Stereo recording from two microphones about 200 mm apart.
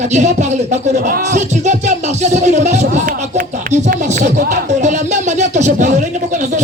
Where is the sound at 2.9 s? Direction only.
35° right (ahead or behind).